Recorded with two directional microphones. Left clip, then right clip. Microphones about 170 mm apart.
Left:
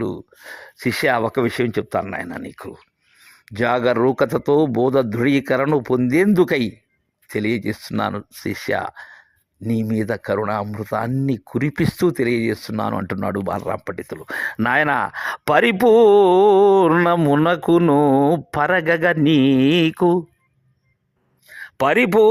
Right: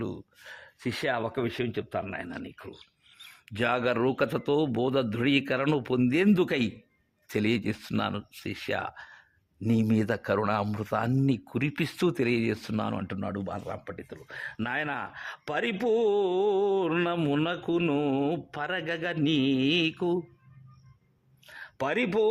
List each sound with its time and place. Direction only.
0.0 s speech: 35° left (ahead or behind)
7.3 s speech: 10° left (ahead or behind)
7.9 s speech: 30° left (ahead or behind)
12.0 s speech: 20° left (ahead or behind); by 20.1 s 45° left (ahead or behind)
21.6 s speech: 40° left (ahead or behind)